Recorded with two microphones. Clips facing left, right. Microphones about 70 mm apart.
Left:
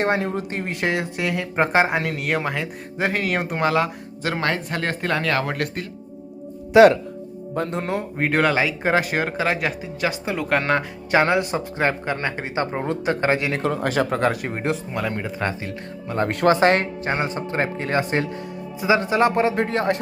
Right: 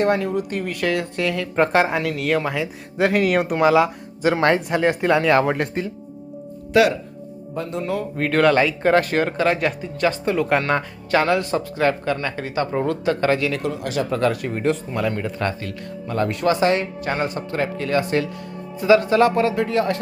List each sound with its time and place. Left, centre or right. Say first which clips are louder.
0.0 s speech: right 2 dB; left
1.1 s speech: right 2 dB; centre
7.5 s speech: left 1 dB; left
7.9 s speech: even; left; by 10.6 s centre
11.1 s speech: even; left
13.7 s speech: left 2 dB; left
14.6 s speech: right 4 dB; centre
16.3 s speech: left 3 dB; left
17.0 s speech: even; left